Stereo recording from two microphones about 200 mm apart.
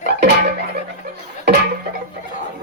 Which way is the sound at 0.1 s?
50° right (ahead or behind).